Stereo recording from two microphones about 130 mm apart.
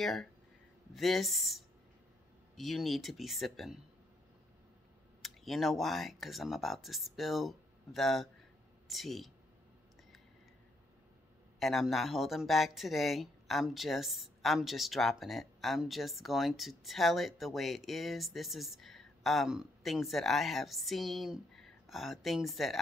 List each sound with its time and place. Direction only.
0.0 s speech: centre (ahead or behind)
5.2 s speech: centre (ahead or behind)
11.6 s speech: centre (ahead or behind)